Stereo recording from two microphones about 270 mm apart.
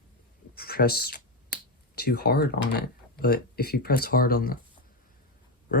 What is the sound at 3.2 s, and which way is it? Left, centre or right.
Speech, left.